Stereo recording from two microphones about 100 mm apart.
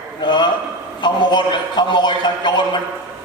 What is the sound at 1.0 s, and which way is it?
A man's voice, 50° left (ahead or behind).